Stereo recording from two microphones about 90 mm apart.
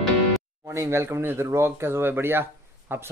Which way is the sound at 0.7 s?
30° right (ahead or behind).